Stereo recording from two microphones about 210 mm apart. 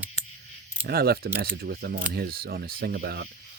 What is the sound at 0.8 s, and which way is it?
Speech, 45° right (ahead or behind).